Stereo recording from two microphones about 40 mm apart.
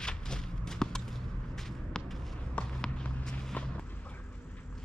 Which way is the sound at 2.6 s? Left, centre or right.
Left.